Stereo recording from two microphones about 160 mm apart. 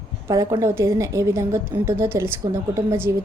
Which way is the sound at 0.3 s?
20° right (ahead or behind).